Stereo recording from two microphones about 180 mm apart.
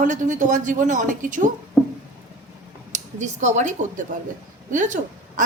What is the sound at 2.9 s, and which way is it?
A woman's voice, 40° right (ahead or behind).